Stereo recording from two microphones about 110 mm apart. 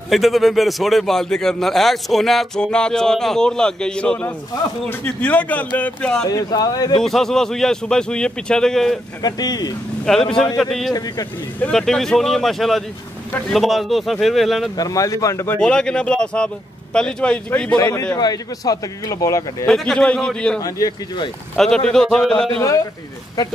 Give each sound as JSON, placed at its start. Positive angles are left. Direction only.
{"t": 0.1, "sound": "a man's voice", "side_deg": 0}
{"t": 6.2, "sound": "speech", "side_deg": 35}
{"t": 7.0, "sound": "a man's voice", "side_deg": 5}
{"t": 9.2, "sound": "speech", "side_deg": 35}
{"t": 10.0, "sound": "a man's voice", "side_deg": 5}
{"t": 10.9, "sound": "speech", "side_deg": 35}
{"t": 11.6, "sound": "a man's voice", "side_deg": 5}
{"t": 14.8, "sound": "speech", "side_deg": 30}
{"t": 15.6, "sound": "speech", "side_deg": 5}
{"t": 17.7, "sound": "speech", "side_deg": 35}
{"t": 19.6, "sound": "speech", "side_deg": 5}
{"t": 20.6, "sound": "speech", "side_deg": 35}
{"t": 21.5, "sound": "a man's voice", "side_deg": 5}
{"t": 22.6, "sound": "speech", "side_deg": 30}